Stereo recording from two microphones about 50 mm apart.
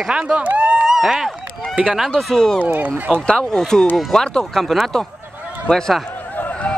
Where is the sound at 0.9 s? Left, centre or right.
Centre.